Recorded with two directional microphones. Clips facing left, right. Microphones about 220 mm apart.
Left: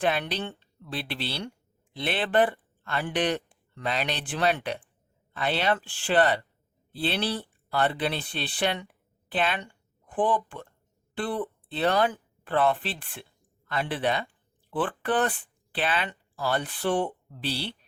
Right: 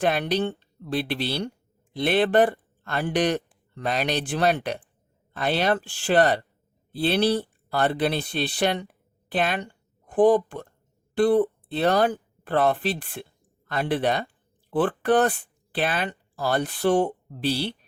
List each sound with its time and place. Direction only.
0.0 s a woman's voice: 45° right (ahead or behind)